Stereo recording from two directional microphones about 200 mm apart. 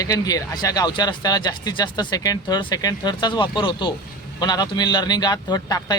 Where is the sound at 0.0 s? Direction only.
15° left (ahead or behind).